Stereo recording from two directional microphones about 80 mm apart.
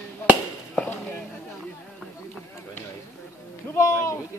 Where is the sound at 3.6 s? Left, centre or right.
Left.